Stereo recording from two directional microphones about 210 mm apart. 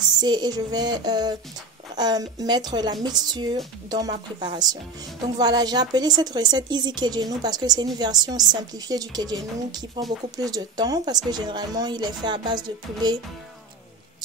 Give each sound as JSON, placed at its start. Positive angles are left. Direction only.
{"t": 0.2, "sound": "speech", "side_deg": -20}